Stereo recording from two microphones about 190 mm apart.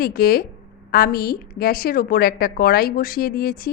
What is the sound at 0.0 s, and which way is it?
A woman's voice, 50° left (ahead or behind).